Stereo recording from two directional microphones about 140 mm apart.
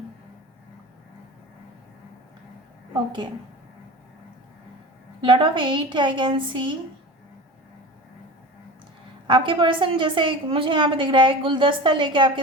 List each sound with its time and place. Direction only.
5.2 s a woman's voice: 35° right (ahead or behind)
9.2 s a woman's voice: 35° right (ahead or behind)